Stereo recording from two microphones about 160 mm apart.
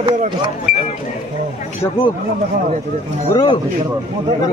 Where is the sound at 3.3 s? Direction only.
25° left (ahead or behind).